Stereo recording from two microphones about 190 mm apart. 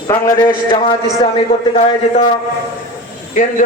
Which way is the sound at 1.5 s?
35° left (ahead or behind).